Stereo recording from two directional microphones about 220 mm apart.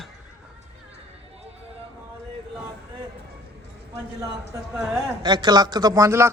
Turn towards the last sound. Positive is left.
turn(degrees=-15)  # may be behind; listen again after turning